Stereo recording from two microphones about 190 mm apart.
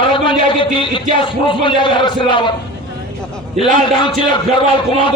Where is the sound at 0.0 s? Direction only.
25° left (ahead or behind).